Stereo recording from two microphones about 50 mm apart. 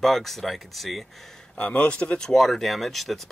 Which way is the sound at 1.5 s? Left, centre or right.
Left.